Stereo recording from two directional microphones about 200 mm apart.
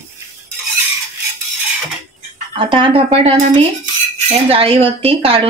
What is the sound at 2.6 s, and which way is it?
Speech, 25° right (ahead or behind).